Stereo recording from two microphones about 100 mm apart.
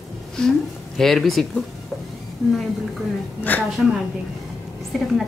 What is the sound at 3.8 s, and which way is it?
A woman's voice, centre (ahead or behind).